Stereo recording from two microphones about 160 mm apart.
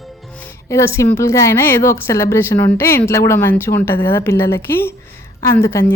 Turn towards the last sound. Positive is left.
turn(degrees=15)  # may be behind; listen again after turning